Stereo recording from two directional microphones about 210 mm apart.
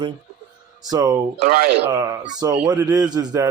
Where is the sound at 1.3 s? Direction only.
45° right (ahead or behind).